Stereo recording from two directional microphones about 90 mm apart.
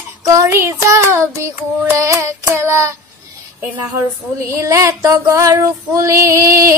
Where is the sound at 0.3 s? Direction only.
35° right (ahead or behind).